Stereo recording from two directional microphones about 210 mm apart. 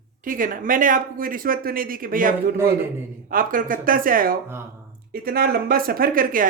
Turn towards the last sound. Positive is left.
turn(degrees=-40)  # may be behind; listen again after turning